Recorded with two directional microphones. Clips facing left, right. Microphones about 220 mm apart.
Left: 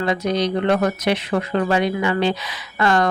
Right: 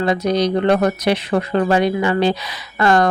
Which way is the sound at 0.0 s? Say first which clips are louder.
Right 3 dB; 35° right (ahead or behind).